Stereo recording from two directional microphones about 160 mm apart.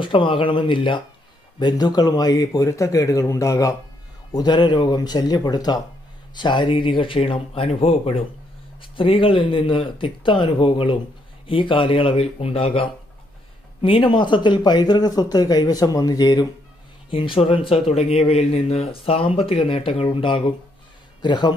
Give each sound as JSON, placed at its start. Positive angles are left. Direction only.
{"t": 0.0, "sound": "speech", "side_deg": 30}
{"t": 17.1, "sound": "speech", "side_deg": 35}